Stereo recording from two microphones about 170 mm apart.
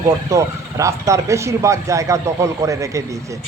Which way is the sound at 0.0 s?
20° right (ahead or behind).